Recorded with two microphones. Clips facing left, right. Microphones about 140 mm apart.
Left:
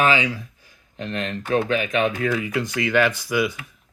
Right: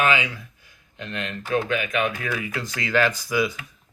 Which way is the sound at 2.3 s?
20° left (ahead or behind).